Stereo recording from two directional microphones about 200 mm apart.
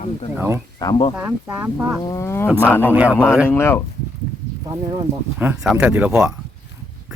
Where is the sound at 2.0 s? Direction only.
15° left (ahead or behind).